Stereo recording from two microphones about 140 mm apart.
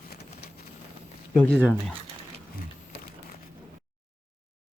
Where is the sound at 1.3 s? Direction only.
10° left (ahead or behind).